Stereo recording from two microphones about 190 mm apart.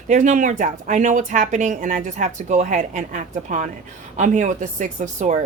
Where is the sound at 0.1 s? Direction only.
40° right (ahead or behind).